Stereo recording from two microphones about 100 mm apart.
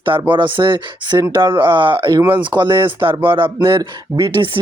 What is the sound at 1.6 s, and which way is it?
Speech, 55° right (ahead or behind).